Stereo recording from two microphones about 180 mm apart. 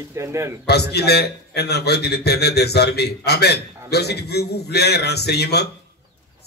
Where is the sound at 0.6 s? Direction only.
65° left (ahead or behind).